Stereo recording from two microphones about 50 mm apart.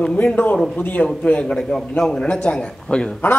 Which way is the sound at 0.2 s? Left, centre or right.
Left.